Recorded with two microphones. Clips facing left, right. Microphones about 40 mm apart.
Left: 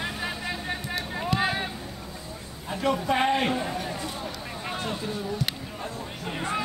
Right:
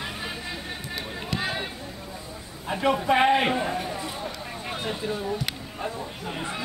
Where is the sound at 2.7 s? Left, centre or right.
Centre.